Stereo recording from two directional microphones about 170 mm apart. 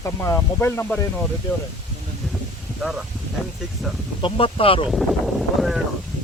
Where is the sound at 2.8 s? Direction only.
5° right (ahead or behind).